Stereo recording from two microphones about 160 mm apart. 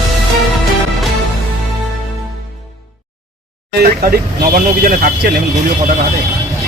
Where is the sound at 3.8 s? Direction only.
65° right (ahead or behind).